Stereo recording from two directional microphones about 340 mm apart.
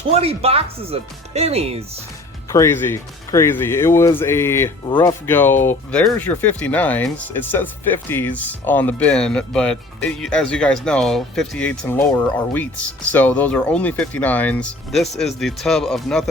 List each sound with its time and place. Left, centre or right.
0.1 s speech: centre
2.5 s speech: centre